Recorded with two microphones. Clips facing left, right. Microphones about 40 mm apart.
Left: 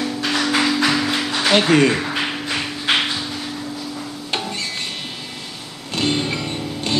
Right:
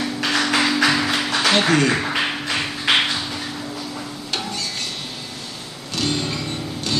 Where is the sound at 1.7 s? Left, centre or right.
Left.